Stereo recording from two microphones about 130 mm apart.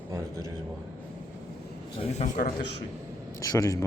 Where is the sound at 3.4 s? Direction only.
25° left (ahead or behind).